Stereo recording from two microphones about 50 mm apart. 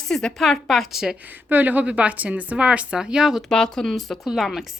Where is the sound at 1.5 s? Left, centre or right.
Right; by 3.4 s centre.